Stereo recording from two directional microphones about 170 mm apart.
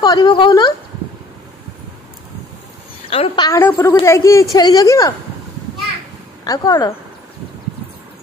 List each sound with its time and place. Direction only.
0.0 s speech: 25° left (ahead or behind)
3.1 s a woman's voice: 35° left (ahead or behind)
3.4 s a woman's voice: 10° left (ahead or behind)
6.4 s speech: 20° left (ahead or behind)